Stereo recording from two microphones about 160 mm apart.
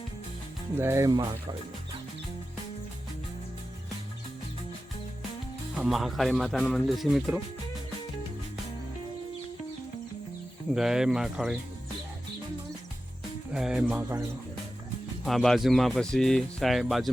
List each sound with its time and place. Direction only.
0.8 s speech: 15° right (ahead or behind)
5.7 s speech: 5° right (ahead or behind)
10.8 s speech: 5° right (ahead or behind)
13.5 s speech: 5° right (ahead or behind)
15.2 s speech: centre (ahead or behind)